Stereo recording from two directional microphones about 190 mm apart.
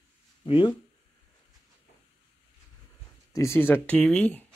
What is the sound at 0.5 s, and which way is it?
Speech, 25° left (ahead or behind).